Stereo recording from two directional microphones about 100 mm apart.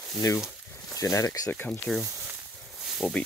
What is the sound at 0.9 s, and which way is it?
Speech, 35° left (ahead or behind).